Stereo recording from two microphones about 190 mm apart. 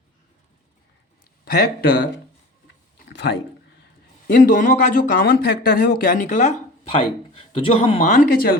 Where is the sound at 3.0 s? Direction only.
70° left (ahead or behind).